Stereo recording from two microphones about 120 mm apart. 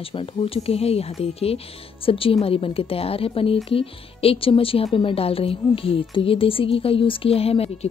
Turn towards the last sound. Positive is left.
turn(degrees=55)  # may be behind; listen again after turning